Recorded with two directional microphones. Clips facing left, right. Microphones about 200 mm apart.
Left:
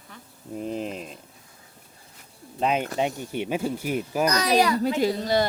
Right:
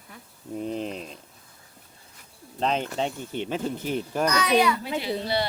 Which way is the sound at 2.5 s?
10° left (ahead or behind).